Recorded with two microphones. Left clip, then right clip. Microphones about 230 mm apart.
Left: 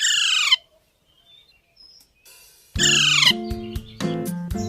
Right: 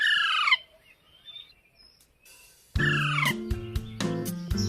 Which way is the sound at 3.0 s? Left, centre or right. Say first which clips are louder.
Left 10 dB; left.